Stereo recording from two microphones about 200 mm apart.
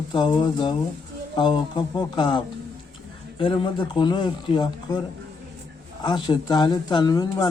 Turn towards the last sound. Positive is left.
turn(degrees=20)  # may be behind; listen again after turning